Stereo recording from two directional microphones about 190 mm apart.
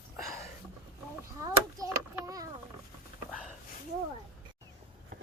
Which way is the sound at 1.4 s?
20° right (ahead or behind).